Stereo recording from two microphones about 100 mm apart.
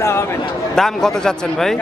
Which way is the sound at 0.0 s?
25° left (ahead or behind).